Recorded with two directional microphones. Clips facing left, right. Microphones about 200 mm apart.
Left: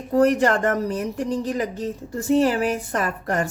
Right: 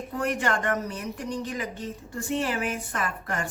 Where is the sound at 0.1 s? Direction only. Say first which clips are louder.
Left 10 dB; 40° left (ahead or behind).